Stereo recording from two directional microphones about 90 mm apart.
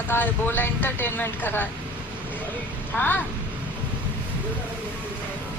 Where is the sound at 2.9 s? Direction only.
25° left (ahead or behind).